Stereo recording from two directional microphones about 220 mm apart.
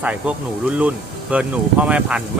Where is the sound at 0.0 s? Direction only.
5° right (ahead or behind).